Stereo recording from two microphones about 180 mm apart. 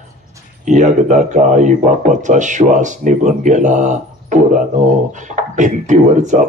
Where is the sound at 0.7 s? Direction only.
40° right (ahead or behind).